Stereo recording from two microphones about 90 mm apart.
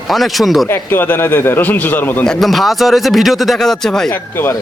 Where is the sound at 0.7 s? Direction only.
25° left (ahead or behind).